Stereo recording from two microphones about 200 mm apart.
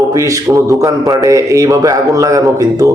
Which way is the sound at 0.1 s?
15° right (ahead or behind).